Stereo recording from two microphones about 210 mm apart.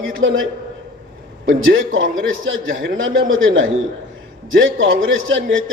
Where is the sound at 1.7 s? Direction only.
65° right (ahead or behind).